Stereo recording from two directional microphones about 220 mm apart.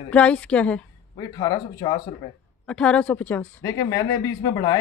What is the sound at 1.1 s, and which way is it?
Speech, 20° left (ahead or behind).